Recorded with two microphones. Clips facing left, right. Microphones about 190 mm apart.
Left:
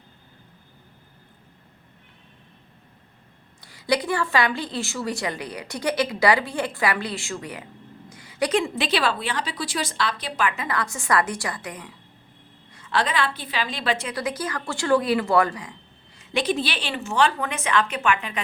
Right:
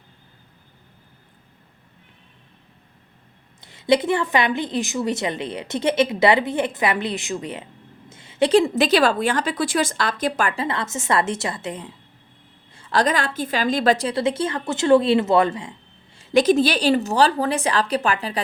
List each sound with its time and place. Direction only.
3.6 s a woman's voice: 25° right (ahead or behind); by 10.5 s 45° right (ahead or behind)
10.5 s a woman's voice: 30° right (ahead or behind)
12.7 s a woman's voice: 35° right (ahead or behind)
16.1 s a woman's voice: 40° right (ahead or behind)